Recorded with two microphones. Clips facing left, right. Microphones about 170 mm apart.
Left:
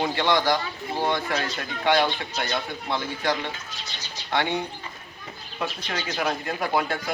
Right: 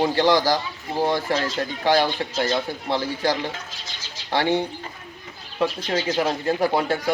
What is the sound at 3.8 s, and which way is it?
Bird, 90° right.